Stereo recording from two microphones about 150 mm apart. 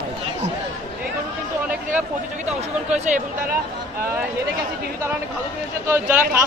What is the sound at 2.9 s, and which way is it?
Speech, 50° right (ahead or behind).